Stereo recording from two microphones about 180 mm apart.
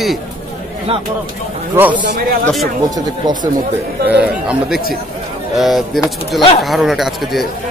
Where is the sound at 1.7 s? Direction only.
10° right (ahead or behind).